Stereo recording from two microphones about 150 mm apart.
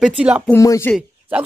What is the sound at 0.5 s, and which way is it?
Speech, 20° left (ahead or behind).